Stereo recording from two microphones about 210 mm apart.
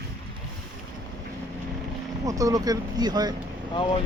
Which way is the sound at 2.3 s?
15° right (ahead or behind).